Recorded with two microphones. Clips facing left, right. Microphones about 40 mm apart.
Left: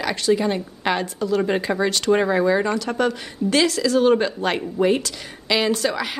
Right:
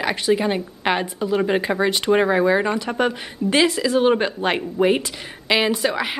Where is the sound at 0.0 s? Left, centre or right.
Right.